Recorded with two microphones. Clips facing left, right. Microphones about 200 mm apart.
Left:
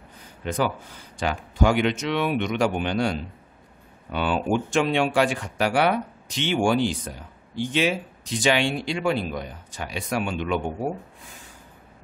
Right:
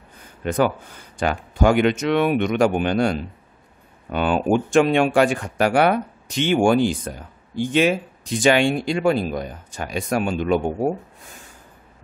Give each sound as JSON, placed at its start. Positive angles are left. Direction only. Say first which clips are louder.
{"t": 0.4, "sound": "speech", "louder": "right 5 dB", "side_deg": -55}